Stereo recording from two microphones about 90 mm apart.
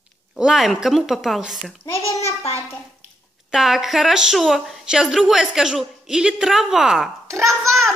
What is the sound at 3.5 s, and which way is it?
A woman's voice, 5° right (ahead or behind).